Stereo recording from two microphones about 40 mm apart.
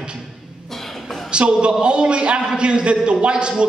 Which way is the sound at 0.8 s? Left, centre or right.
Centre.